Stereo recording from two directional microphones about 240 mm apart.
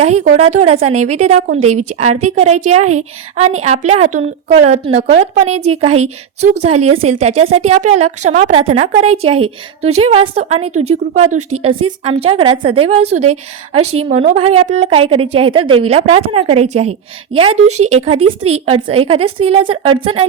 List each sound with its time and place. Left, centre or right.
0.0 s speech: right